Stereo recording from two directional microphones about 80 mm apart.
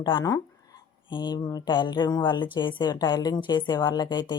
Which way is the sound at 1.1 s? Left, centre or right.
Left.